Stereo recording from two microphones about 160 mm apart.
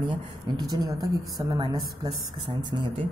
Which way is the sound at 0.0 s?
25° right (ahead or behind).